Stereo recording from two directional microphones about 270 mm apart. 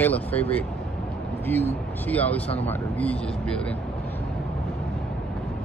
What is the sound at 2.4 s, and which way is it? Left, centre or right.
Speech, left.